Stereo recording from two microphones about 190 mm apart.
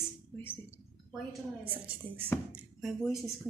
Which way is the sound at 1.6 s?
10° right (ahead or behind).